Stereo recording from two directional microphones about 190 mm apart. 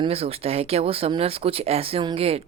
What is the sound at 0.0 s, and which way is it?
Speech, 30° right (ahead or behind).